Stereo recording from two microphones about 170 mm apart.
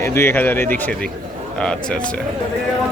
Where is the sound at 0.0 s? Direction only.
15° left (ahead or behind).